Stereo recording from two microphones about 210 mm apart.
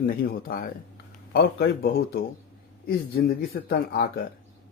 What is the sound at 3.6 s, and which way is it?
Speech, 50° left (ahead or behind).